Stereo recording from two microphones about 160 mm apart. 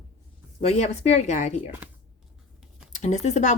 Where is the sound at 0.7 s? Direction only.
45° left (ahead or behind).